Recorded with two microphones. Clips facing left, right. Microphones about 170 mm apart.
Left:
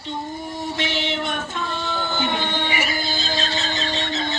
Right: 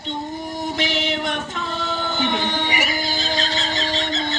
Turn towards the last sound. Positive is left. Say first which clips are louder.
# right 1 dB
turn(degrees=-15)  # may be behind; listen again after turning